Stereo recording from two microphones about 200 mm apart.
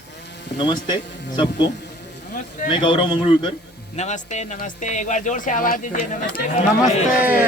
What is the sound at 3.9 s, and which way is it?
Speech, 35° left (ahead or behind).